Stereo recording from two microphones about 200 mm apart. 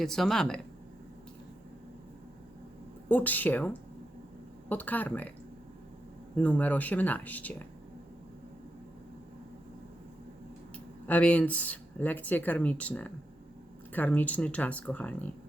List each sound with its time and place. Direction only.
0.0 s speech: centre (ahead or behind)
3.1 s speech: 10° left (ahead or behind)
6.3 s speech: 5° left (ahead or behind)
11.0 s speech: 5° left (ahead or behind)